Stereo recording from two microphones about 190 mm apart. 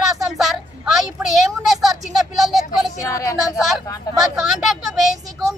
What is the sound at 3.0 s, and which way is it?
Speech, 15° left (ahead or behind).